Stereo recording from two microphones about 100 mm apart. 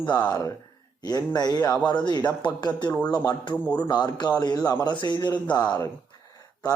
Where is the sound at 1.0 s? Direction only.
40° left (ahead or behind).